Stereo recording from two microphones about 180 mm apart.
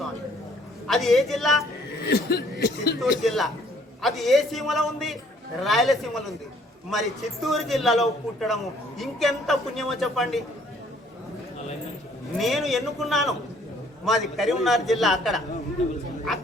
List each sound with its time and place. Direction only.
0.9 s a man's voice: centre (ahead or behind)
2.0 s speech: 65° left (ahead or behind)
3.0 s a man's voice: centre (ahead or behind)
12.4 s a man's voice: centre (ahead or behind)